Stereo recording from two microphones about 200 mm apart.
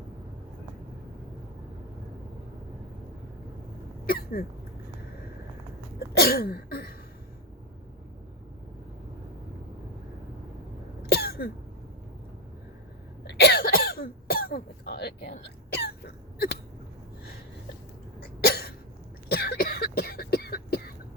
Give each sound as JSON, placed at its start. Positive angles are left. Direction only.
{"t": 4.0, "sound": "throat clearing", "side_deg": 50}
{"t": 6.1, "sound": "throat clearing", "side_deg": 50}
{"t": 11.0, "sound": "cough", "side_deg": 50}
{"t": 13.2, "sound": "cough", "side_deg": 55}
{"t": 15.7, "sound": "throat clearing", "side_deg": 55}
{"t": 18.4, "sound": "hiccup", "side_deg": 55}
{"t": 19.3, "sound": "cough", "side_deg": 50}